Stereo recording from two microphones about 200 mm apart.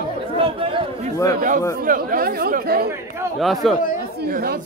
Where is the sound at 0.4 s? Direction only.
25° right (ahead or behind).